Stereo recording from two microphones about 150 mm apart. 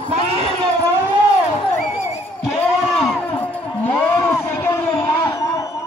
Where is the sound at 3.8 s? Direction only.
15° left (ahead or behind).